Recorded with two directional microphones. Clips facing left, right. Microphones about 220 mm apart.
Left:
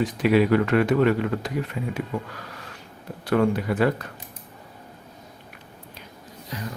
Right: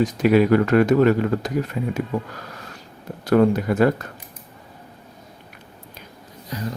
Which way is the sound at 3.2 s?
40° right (ahead or behind).